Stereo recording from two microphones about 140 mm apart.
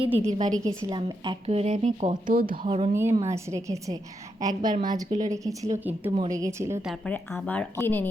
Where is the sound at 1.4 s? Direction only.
45° right (ahead or behind); by 2.5 s 85° right.